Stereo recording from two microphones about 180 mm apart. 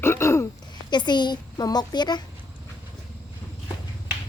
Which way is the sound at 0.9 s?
25° left (ahead or behind).